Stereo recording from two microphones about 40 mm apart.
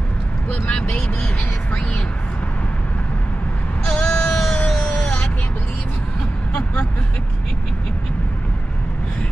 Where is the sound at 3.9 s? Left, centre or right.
Centre.